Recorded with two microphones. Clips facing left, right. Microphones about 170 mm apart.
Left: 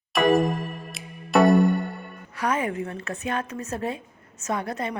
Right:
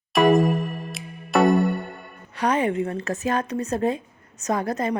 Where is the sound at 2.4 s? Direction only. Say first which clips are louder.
Right 4 dB; 30° right (ahead or behind).